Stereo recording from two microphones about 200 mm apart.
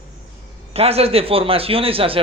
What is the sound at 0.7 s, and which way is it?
A man's voice, 30° right (ahead or behind).